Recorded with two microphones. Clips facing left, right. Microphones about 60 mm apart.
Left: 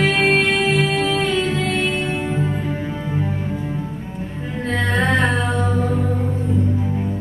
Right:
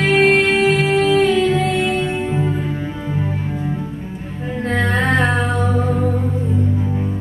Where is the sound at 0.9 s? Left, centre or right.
Right.